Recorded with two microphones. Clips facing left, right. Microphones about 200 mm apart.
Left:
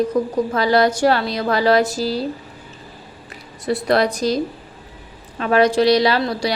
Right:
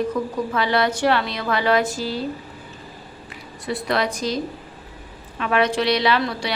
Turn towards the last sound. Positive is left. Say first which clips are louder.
# left 3 dB
turn(degrees=40)  # may be behind; listen again after turning